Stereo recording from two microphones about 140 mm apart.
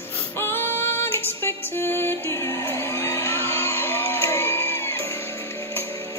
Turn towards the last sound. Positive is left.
turn(degrees=15)  # may be behind; listen again after turning